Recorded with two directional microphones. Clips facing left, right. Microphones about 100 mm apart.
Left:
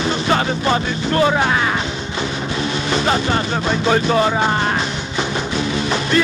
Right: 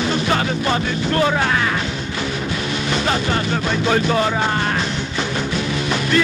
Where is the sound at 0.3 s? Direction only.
25° left (ahead or behind).